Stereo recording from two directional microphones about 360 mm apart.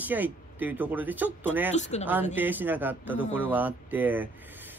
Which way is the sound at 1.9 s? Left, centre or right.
Centre.